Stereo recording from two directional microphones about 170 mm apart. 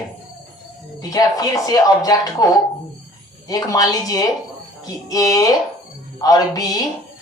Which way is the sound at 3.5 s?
20° left (ahead or behind).